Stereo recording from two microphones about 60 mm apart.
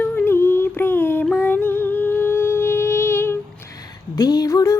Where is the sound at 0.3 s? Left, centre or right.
Left.